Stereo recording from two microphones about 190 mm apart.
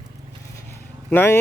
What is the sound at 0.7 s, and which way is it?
Vehicle, 10° left (ahead or behind).